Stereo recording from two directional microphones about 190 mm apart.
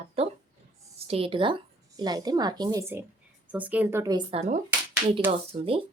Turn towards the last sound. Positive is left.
turn(degrees=-30)  # may be behind; listen again after turning